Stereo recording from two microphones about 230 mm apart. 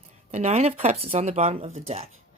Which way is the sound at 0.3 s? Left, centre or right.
Right.